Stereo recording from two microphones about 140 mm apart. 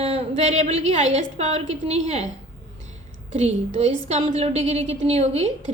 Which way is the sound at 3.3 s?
50° right (ahead or behind).